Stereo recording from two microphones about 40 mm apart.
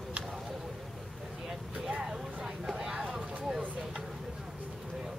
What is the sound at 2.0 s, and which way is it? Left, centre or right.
Vehicle, centre.